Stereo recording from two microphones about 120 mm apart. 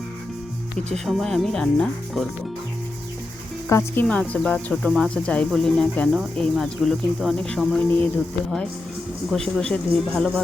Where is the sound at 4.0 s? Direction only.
10° left (ahead or behind).